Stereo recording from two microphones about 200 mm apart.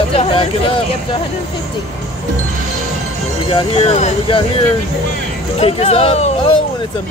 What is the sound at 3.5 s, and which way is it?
Speech, 30° left (ahead or behind).